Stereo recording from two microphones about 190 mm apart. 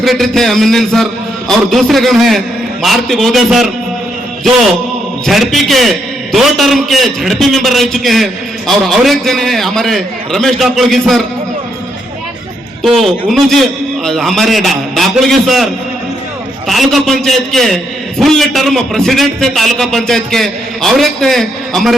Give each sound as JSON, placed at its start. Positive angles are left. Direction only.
{"t": 0.0, "sound": "a man's voice", "side_deg": 0}
{"t": 5.2, "sound": "a man's voice", "side_deg": 0}
{"t": 12.8, "sound": "a man's voice", "side_deg": 0}
{"t": 16.6, "sound": "a man's voice", "side_deg": 0}